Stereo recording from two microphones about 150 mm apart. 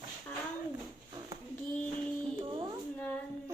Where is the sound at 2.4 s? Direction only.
35° right (ahead or behind).